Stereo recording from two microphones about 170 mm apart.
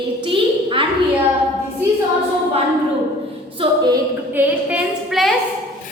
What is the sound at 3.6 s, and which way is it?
Speech, 25° right (ahead or behind).